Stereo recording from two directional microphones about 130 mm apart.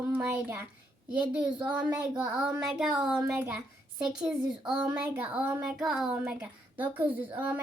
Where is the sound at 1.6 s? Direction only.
30° right (ahead or behind).